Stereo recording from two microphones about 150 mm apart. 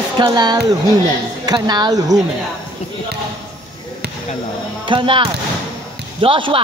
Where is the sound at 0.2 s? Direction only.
30° right (ahead or behind).